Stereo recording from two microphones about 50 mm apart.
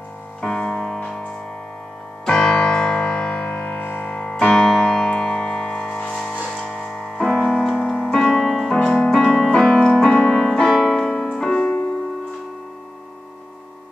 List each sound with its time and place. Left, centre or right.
0.4 s music: centre
3.8 s music: left
4.1 s music: left
8.0 s keyboard: centre
8.3 s music: centre
8.8 s keyboard: centre
10.1 s music: centre
10.9 s piano: centre
11.5 s music: left